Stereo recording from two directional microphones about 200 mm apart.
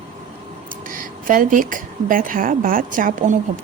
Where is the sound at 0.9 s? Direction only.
45° right (ahead or behind).